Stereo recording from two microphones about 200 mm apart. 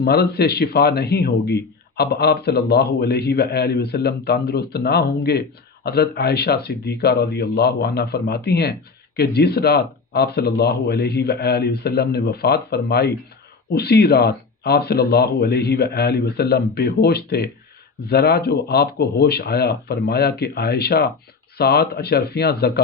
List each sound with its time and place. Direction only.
0.0 s a man's voice: 50° left (ahead or behind)